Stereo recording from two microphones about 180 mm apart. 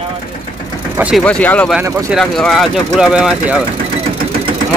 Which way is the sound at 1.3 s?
5° left (ahead or behind).